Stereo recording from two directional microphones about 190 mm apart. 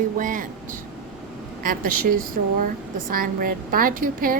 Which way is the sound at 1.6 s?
45° right (ahead or behind).